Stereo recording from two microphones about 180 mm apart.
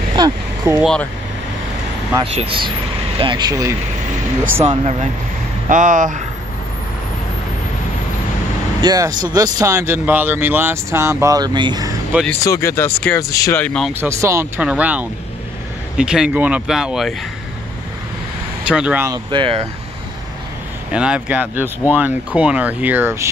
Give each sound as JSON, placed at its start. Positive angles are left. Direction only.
{"t": 0.1, "sound": "a sound", "side_deg": -25}
{"t": 2.3, "sound": "speech", "side_deg": -30}
{"t": 4.6, "sound": "speech", "side_deg": -40}
{"t": 8.8, "sound": "speech", "side_deg": -20}
{"t": 12.3, "sound": "speech", "side_deg": 15}
{"t": 13.6, "sound": "speech", "side_deg": 5}
{"t": 13.9, "sound": "speech", "side_deg": -15}
{"t": 18.7, "sound": "speech", "side_deg": -5}
{"t": 19.0, "sound": "speech", "side_deg": -25}
{"t": 20.9, "sound": "speech", "side_deg": -5}